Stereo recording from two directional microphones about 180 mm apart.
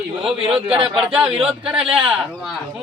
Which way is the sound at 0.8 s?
5° right (ahead or behind).